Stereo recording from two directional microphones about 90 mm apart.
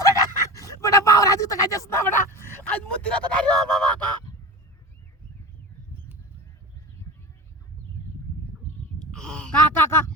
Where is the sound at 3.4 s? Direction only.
10° left (ahead or behind).